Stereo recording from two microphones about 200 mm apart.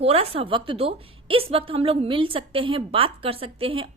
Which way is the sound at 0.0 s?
30° right (ahead or behind).